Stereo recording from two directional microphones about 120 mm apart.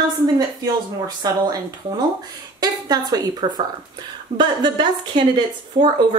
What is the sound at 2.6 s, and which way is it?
Speech, 30° right (ahead or behind).